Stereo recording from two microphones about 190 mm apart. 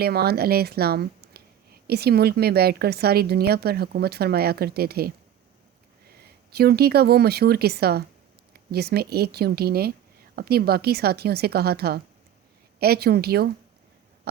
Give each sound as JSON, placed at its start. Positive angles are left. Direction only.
{"t": 0.0, "sound": "speech", "side_deg": -55}
{"t": 6.2, "sound": "speech", "side_deg": -55}